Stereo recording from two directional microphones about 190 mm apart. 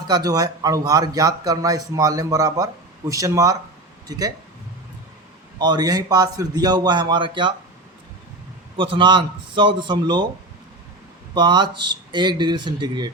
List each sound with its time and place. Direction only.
0.1 s speech: 20° right (ahead or behind)
5.5 s speech: 20° right (ahead or behind)
8.7 s speech: 25° right (ahead or behind)
11.3 s speech: 25° right (ahead or behind)